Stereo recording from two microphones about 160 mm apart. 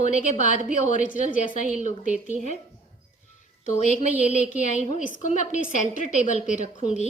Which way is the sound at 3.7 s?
50° left (ahead or behind).